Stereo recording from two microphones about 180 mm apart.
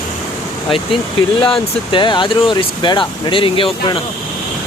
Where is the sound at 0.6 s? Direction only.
30° left (ahead or behind).